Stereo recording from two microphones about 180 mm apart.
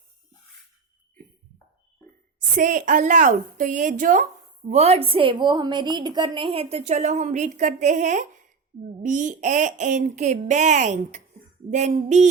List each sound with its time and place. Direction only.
2.6 s speech: 45° right (ahead or behind)
4.7 s a woman's voice: 35° right (ahead or behind)